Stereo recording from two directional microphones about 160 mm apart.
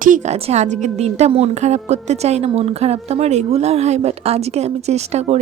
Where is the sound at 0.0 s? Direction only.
55° right (ahead or behind).